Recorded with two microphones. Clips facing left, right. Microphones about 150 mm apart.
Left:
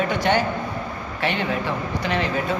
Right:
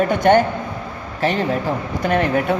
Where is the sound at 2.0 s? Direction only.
55° right (ahead or behind).